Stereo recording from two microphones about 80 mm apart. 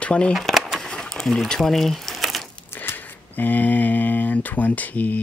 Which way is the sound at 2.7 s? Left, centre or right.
Left.